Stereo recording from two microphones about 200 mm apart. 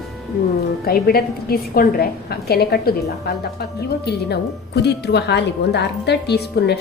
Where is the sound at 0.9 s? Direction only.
50° left (ahead or behind).